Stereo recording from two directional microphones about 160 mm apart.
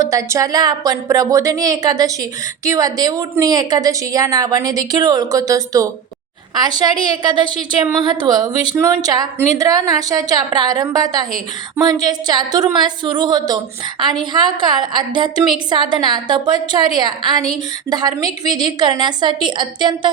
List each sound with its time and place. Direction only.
0.0 s a woman's voice: 20° right (ahead or behind)